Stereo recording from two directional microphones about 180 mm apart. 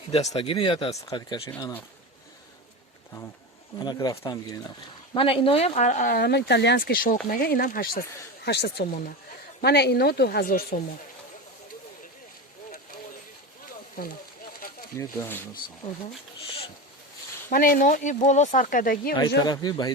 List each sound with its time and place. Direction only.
0.1 s speech: 35° left (ahead or behind); by 1.8 s 15° left (ahead or behind)
3.8 s speech: 20° left (ahead or behind); by 8.0 s 50° left (ahead or behind)
8.4 s speech: 65° left (ahead or behind)
14.0 s speech: 50° left (ahead or behind)
14.9 s speech: 15° left (ahead or behind)
17.5 s speech: 50° left (ahead or behind)
19.4 s speech: 20° left (ahead or behind)